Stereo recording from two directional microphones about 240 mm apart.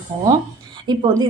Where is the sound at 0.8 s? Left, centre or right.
Centre.